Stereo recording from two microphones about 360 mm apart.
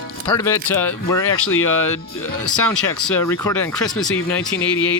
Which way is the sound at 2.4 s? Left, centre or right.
Centre.